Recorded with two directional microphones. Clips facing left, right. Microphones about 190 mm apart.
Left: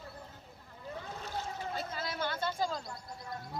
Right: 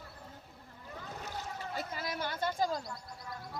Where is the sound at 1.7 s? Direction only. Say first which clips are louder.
Right 2 dB; 15° right (ahead or behind).